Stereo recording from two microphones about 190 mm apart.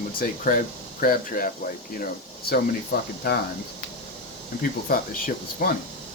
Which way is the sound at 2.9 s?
55° left (ahead or behind).